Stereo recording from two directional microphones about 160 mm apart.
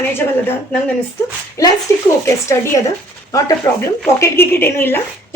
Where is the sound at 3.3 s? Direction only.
15° left (ahead or behind).